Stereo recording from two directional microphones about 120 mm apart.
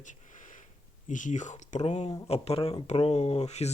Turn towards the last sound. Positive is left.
turn(degrees=65)  # may be behind; listen again after turning